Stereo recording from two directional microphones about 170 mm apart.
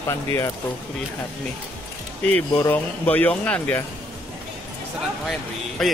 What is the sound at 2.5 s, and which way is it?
Speech, 10° left (ahead or behind).